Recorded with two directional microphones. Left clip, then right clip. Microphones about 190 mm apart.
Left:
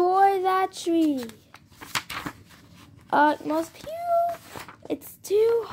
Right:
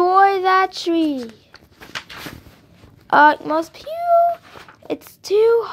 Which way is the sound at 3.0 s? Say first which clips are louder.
Right 8 dB; 5° right (ahead or behind).